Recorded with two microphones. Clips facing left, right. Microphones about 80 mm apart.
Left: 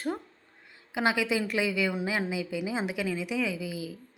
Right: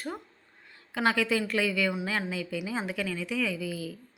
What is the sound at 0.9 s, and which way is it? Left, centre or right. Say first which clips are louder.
A woman's voice: even; centre.